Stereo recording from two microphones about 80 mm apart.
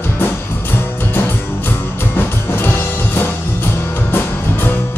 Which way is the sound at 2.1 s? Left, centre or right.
Left.